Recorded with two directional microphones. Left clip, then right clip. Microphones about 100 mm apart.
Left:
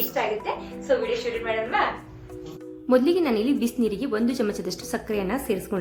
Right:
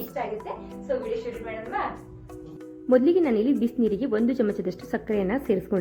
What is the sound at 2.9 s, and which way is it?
A woman's voice, 20° right (ahead or behind).